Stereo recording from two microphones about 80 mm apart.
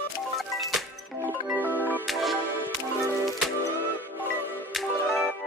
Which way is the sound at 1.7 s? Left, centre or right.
Left.